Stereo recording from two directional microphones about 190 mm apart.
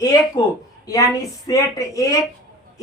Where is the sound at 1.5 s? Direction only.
20° left (ahead or behind).